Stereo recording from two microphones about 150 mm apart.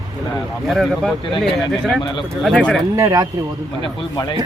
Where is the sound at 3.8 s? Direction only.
30° left (ahead or behind).